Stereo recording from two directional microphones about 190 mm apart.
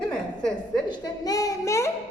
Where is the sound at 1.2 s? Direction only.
20° left (ahead or behind).